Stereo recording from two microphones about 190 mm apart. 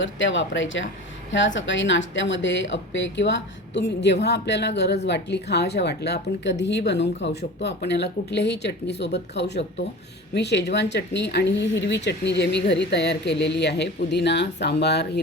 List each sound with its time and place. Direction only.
0.0 s a woman's voice: 80° left; by 15.2 s 60° left (ahead or behind)